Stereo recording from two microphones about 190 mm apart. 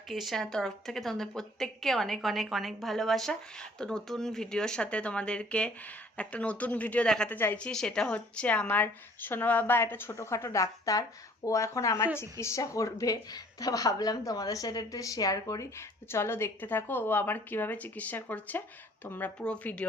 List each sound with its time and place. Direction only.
0.1 s a woman's voice: centre (ahead or behind)